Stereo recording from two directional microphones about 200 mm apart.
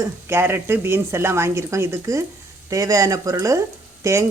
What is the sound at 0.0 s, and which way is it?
A woman's voice, 10° right (ahead or behind).